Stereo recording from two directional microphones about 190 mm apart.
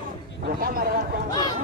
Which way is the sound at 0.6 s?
50° right (ahead or behind).